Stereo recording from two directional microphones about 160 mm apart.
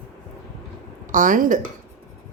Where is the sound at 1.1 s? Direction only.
55° right (ahead or behind).